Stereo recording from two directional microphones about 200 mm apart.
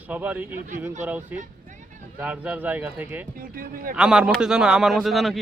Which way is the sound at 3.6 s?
45° right (ahead or behind).